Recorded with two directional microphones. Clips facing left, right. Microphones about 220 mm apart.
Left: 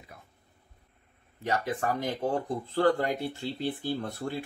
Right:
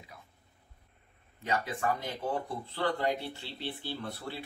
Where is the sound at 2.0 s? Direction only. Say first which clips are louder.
Left 5 dB; 45° left (ahead or behind).